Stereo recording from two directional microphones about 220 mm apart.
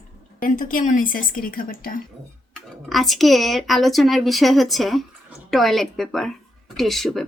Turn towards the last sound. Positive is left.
turn(degrees=0)  # may be behind; listen again after turning